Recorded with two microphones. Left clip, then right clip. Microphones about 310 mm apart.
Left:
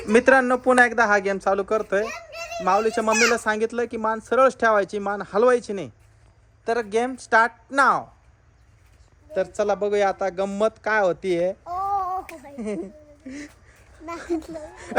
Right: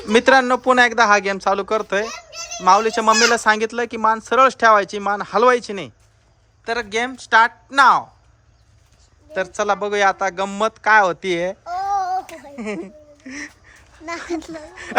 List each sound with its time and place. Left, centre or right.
0.1 s speech: centre
9.3 s speech: centre
11.7 s child singing: right
12.5 s speech: centre
14.3 s speech: right